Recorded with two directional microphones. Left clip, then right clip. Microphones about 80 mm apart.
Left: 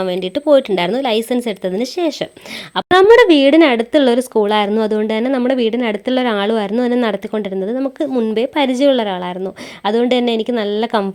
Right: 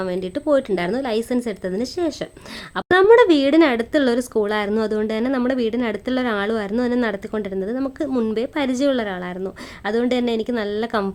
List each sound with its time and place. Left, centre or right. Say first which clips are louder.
0.0 s a woman's voice: left 6 dB; left
2.9 s a woman's voice: left 4 dB; left
8.1 s a woman's voice: left 3 dB; centre
8.4 s a woman's voice: left 7 dB; left